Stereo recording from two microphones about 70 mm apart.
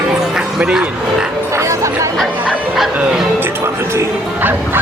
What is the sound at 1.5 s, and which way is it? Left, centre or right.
Music, right.